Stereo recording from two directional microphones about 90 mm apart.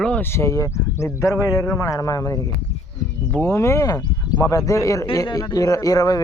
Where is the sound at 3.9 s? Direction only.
45° left (ahead or behind).